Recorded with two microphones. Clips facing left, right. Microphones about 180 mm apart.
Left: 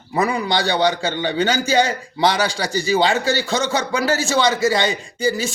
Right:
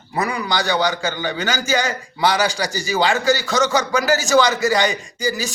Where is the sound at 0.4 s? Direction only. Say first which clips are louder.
Left 2 dB; 30° left (ahead or behind).